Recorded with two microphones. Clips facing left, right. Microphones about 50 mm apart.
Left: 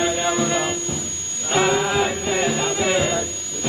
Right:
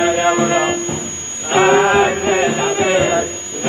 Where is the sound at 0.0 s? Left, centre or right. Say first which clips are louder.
Right 7 dB; right.